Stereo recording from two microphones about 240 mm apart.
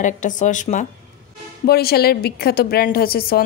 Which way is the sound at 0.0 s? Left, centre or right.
Left.